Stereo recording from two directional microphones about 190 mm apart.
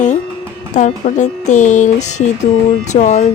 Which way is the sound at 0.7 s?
40° left (ahead or behind).